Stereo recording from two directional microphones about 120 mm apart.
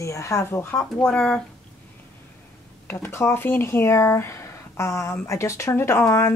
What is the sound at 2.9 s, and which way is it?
Speech, 20° left (ahead or behind).